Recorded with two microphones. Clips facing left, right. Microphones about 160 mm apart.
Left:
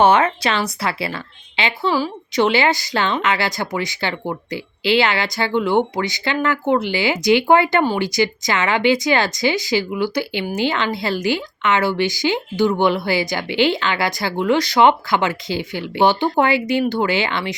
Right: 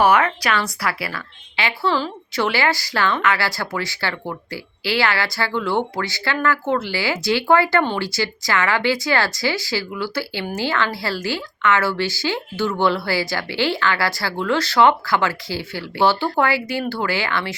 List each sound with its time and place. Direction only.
0.0 s speech: 25° left (ahead or behind)